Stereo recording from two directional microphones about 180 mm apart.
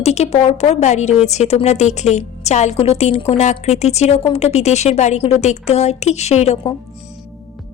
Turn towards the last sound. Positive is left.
turn(degrees=35)  # may be behind; listen again after turning